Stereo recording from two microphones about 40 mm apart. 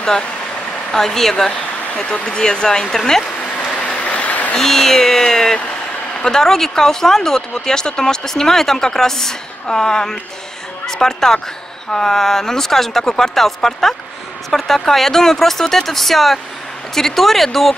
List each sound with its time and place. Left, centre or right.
0.9 s speech: centre
3.7 s a sound: left
4.6 s speech: centre